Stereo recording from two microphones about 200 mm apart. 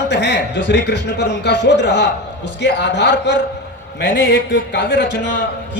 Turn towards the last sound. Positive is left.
turn(degrees=60)  # may be behind; listen again after turning